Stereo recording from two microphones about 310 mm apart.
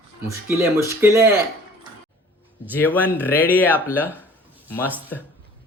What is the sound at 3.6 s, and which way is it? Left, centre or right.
Speech, centre.